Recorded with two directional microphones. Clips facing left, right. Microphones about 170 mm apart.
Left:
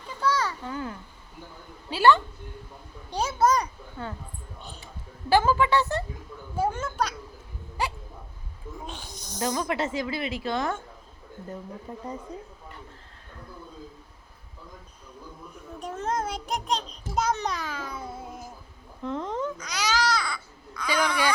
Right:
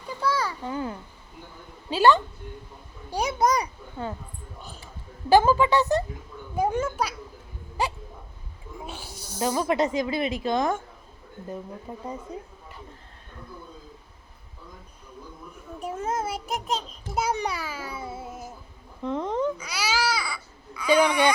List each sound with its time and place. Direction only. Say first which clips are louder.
0.2 s a sound: even; 10° right (ahead or behind)
1.9 s a woman's voice: right 1 dB; 15° right (ahead or behind)
5.3 s a woman's voice: right 3 dB; 15° right (ahead or behind)
8.9 s a woman's voice: right 1 dB; 10° right (ahead or behind)
11.9 s a woman's voice: even; 10° right (ahead or behind)
15.8 s a child's voice: right 1 dB; 10° right (ahead or behind)